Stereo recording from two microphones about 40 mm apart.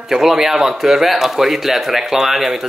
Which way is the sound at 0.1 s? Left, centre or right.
Centre.